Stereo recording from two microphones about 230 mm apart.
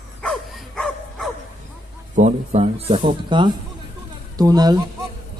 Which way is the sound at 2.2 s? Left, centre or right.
Right.